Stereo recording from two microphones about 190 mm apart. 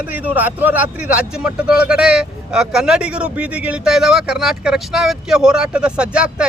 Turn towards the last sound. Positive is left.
turn(degrees=-5)  # may be behind; listen again after turning